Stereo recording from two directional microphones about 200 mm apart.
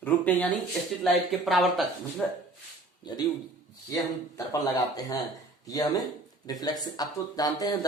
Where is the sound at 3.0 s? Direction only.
20° left (ahead or behind).